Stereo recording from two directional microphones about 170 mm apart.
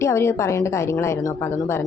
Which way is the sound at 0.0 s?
15° left (ahead or behind).